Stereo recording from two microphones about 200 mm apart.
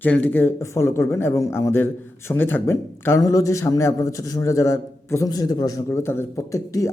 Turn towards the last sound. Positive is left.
turn(degrees=15)  # may be behind; listen again after turning